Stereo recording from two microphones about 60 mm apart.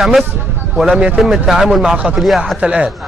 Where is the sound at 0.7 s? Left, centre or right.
Centre.